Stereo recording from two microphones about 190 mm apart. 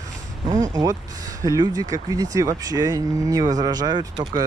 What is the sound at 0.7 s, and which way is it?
Speech, 20° right (ahead or behind).